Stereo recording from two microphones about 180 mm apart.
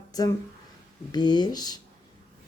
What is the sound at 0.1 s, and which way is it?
Speech, 20° left (ahead or behind).